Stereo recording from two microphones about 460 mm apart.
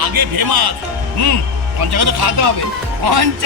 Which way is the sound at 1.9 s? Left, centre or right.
Right.